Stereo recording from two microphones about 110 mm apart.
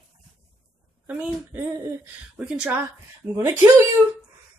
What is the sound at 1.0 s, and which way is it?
Speech, 10° right (ahead or behind).